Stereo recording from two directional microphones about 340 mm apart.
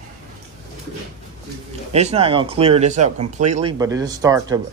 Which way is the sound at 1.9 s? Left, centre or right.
Centre.